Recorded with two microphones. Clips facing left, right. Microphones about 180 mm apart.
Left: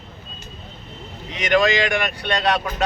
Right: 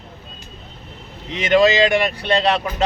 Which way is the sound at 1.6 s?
30° right (ahead or behind).